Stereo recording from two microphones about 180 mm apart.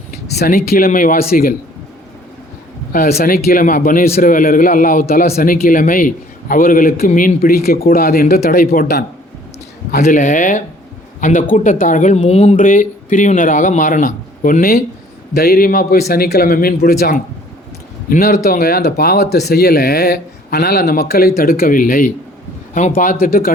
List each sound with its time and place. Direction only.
0.3 s a man's voice: 55° left (ahead or behind)
2.9 s a man's voice: 55° left (ahead or behind)
10.0 s a man's voice: 45° left (ahead or behind)